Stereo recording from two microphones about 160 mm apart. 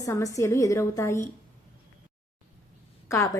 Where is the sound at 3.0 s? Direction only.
15° left (ahead or behind).